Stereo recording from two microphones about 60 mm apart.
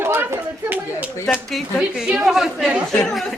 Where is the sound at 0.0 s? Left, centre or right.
Right.